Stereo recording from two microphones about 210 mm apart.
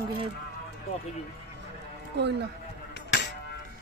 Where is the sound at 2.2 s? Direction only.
55° right (ahead or behind).